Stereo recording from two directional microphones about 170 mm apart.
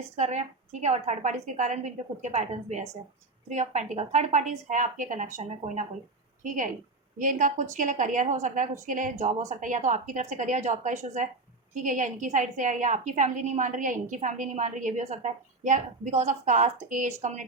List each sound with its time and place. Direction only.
0.2 s a woman's voice: 40° right (ahead or behind)